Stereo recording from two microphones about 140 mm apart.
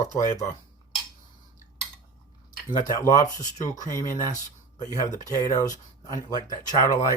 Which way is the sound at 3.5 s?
60° left (ahead or behind).